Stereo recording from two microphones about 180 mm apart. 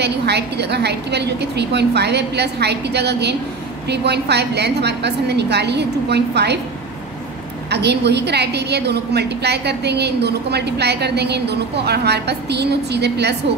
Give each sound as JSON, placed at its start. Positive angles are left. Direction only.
{"t": 0.0, "sound": "a woman's voice", "side_deg": -65}
{"t": 7.7, "sound": "a woman's voice", "side_deg": -70}